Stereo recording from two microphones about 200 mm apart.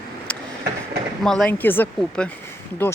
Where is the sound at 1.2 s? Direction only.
5° left (ahead or behind).